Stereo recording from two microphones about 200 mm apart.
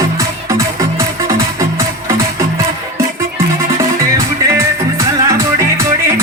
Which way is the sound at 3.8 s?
15° right (ahead or behind).